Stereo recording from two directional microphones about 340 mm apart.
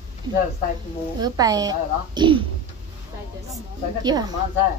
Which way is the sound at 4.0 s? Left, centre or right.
Centre.